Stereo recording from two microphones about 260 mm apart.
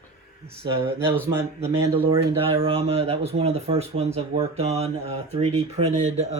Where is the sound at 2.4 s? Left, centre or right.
Right.